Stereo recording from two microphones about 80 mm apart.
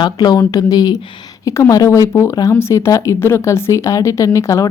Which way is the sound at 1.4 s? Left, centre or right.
Left.